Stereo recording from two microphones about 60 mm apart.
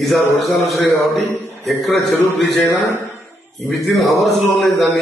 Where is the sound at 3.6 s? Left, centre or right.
Centre.